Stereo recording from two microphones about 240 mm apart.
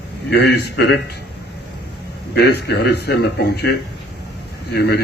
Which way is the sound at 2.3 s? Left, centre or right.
Left.